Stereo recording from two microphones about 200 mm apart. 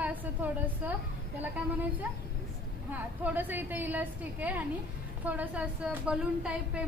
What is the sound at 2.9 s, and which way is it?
A woman's voice, 10° right (ahead or behind).